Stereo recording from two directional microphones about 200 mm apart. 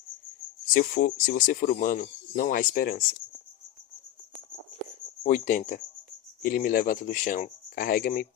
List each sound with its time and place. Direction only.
0.7 s speech: 45° left (ahead or behind)
5.2 s speech: 40° left (ahead or behind)